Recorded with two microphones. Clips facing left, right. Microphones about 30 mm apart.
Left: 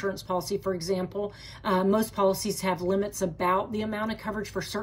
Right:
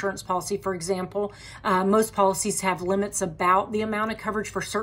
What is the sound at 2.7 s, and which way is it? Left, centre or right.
Speech, right.